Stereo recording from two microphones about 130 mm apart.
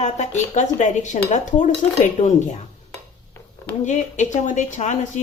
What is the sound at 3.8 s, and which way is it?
Speech, 70° left (ahead or behind).